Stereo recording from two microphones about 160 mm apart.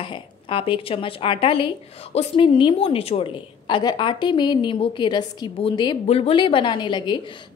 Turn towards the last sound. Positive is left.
turn(degrees=30)  # may be behind; listen again after turning